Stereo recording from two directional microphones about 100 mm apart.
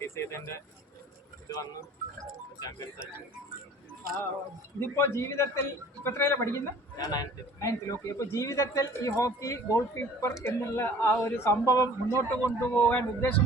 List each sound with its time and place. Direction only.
0.0 s a man's voice: 25° left (ahead or behind)
4.8 s speech: 25° left (ahead or behind)
6.9 s a man's voice: 40° left (ahead or behind)
7.6 s a man's voice: 30° left (ahead or behind)